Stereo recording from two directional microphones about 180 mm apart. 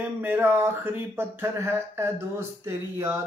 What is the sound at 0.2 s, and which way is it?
Speech, 10° right (ahead or behind).